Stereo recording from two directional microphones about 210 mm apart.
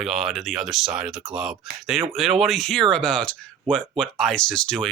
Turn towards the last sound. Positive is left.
turn(degrees=5)  # may be behind; listen again after turning